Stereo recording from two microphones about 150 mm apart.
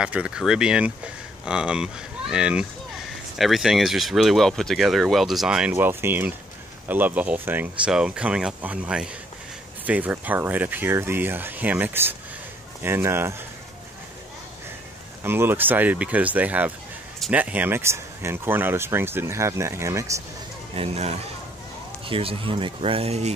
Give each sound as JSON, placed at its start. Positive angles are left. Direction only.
{"t": 0.0, "sound": "speech", "side_deg": -10}
{"t": 15.2, "sound": "speech", "side_deg": -15}
{"t": 20.7, "sound": "speech", "side_deg": -45}